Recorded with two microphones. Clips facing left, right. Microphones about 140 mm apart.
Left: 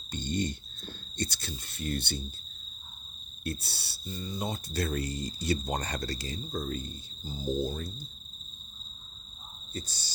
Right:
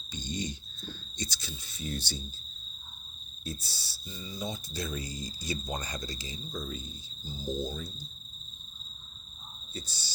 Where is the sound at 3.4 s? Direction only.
65° left (ahead or behind).